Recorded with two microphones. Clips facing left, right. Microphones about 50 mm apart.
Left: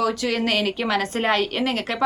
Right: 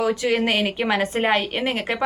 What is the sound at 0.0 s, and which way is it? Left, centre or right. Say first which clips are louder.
A woman's voice: right 2 dB; right.